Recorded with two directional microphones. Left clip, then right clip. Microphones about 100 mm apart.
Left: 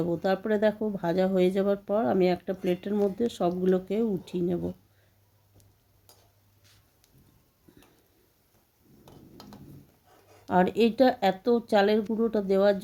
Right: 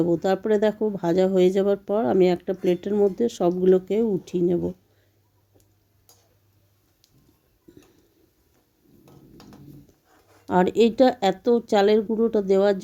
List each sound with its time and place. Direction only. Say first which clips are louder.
0.0 s speech: right 5 dB; 25° right (ahead or behind)
10.5 s speech: right 4 dB; 30° right (ahead or behind)